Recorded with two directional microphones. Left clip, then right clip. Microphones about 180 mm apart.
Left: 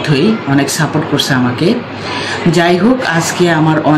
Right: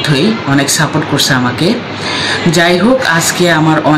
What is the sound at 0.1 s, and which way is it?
Speech, 5° right (ahead or behind).